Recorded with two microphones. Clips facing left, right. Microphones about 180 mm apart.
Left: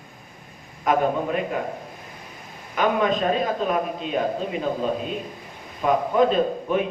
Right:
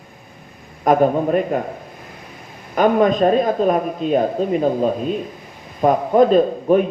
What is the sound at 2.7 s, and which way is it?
A man's voice, 45° right (ahead or behind).